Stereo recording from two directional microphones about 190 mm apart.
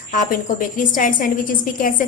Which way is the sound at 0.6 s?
45° left (ahead or behind).